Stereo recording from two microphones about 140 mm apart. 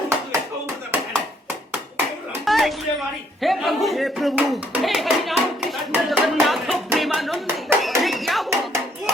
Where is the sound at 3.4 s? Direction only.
Centre (ahead or behind).